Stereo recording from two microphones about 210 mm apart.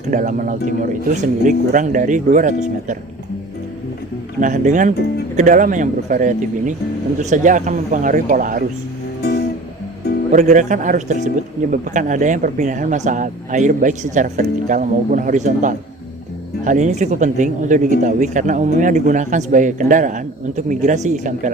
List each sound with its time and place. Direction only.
0.1 s speech: 40° right (ahead or behind)
4.4 s speech: 35° right (ahead or behind)
10.3 s speech: 35° right (ahead or behind)